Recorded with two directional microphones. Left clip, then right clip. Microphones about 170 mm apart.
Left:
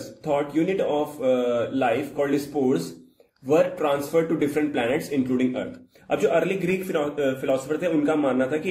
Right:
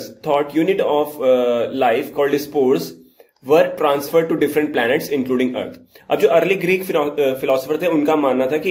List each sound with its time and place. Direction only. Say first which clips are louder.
0.2 s speech: right 6 dB; 20° left (ahead or behind)